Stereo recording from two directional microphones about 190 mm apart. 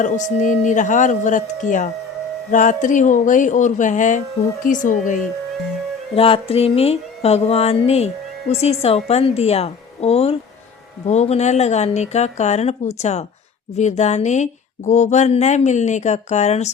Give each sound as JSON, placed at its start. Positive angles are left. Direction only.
{"t": 0.0, "sound": "speech", "side_deg": 40}
{"t": 6.1, "sound": "speech", "side_deg": 30}